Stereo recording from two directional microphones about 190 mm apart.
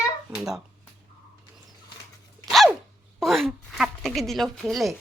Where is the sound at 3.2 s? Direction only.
Centre (ahead or behind).